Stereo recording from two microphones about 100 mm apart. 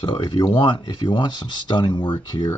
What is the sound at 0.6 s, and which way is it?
Speech, 50° left (ahead or behind).